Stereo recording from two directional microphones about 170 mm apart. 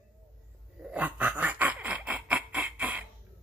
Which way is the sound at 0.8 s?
10° right (ahead or behind).